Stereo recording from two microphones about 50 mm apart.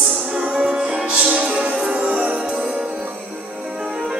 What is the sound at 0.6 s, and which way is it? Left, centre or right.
Music, right.